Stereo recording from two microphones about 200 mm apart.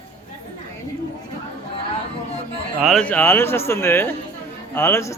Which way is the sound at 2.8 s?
Centre (ahead or behind).